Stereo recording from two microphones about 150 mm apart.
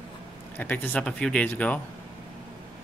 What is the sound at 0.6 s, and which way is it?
Speech, 10° left (ahead or behind).